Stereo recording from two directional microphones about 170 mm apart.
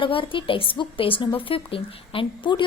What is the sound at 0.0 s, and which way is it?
Speech, 30° left (ahead or behind).